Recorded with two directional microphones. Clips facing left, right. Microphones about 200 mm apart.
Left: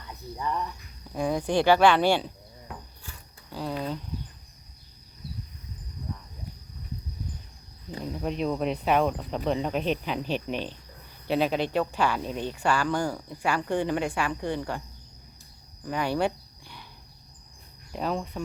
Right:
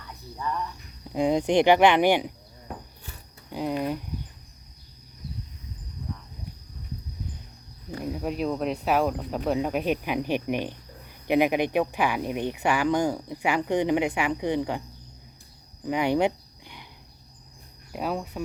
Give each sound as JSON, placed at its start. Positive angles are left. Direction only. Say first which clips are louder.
{"t": 0.4, "sound": "speech", "louder": "even", "side_deg": 20}
{"t": 1.1, "sound": "speech", "louder": "right 4 dB", "side_deg": -20}
{"t": 3.5, "sound": "speech", "louder": "right 4 dB", "side_deg": -15}
{"t": 8.0, "sound": "speech", "louder": "right 1 dB", "side_deg": -5}
{"t": 15.9, "sound": "a sound", "louder": "right 4 dB", "side_deg": -20}
{"t": 17.9, "sound": "speech", "louder": "even", "side_deg": -10}